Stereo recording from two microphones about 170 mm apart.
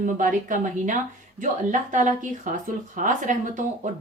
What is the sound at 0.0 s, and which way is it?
Speech, 50° right (ahead or behind).